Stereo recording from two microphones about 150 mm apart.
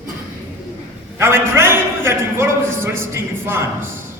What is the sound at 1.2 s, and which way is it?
A man's voice, 15° right (ahead or behind).